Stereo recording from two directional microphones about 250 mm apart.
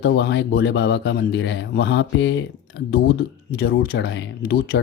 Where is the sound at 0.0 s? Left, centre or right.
Left.